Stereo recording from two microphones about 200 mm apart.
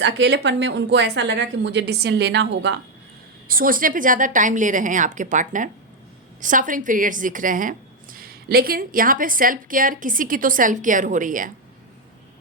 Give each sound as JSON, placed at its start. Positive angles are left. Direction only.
{"t": 0.0, "sound": "a woman's voice", "side_deg": -60}
{"t": 3.5, "sound": "a woman's voice", "side_deg": -45}